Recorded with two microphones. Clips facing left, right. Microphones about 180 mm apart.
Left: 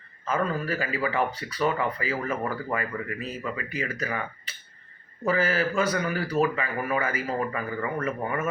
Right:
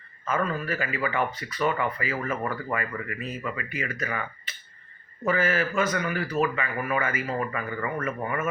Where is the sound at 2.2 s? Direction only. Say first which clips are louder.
Even; 10° left (ahead or behind).